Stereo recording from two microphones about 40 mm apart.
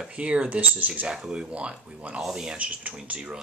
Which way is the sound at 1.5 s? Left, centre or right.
Right.